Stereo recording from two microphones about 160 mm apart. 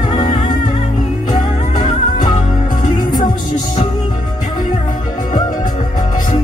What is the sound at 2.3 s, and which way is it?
Music, 50° left (ahead or behind).